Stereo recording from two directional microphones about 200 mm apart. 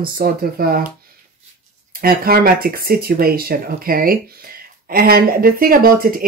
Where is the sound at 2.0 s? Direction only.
50° right (ahead or behind).